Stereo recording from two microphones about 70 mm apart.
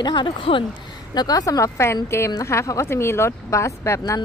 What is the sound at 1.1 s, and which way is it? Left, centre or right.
Speech, left.